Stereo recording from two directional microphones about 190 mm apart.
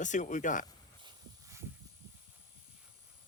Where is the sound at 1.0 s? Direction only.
15° right (ahead or behind).